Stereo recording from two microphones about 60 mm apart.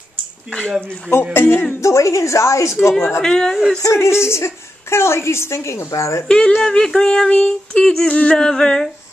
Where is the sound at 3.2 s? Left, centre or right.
Centre.